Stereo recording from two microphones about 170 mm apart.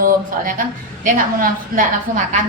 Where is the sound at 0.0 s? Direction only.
55° right (ahead or behind).